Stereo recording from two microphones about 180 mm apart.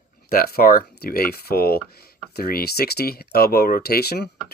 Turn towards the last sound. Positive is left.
turn(degrees=60)  # may be behind; listen again after turning